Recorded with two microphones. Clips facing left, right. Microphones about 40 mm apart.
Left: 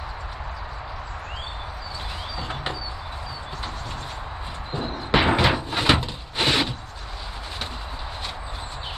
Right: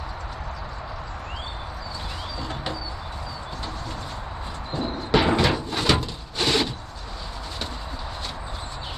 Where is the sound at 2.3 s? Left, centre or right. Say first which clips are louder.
Left 1 dB; left.